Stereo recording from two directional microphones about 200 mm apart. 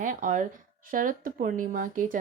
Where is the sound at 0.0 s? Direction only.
40° right (ahead or behind).